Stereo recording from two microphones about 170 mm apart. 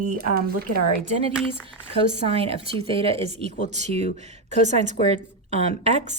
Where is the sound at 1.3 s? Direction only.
5° right (ahead or behind).